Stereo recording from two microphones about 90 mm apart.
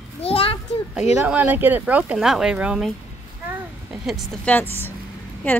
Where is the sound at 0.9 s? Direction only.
10° right (ahead or behind).